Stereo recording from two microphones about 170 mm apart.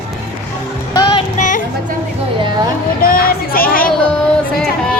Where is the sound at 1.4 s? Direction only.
50° left (ahead or behind).